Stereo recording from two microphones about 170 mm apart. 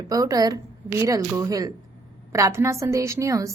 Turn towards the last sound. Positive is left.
turn(degrees=-20)  # may be behind; listen again after turning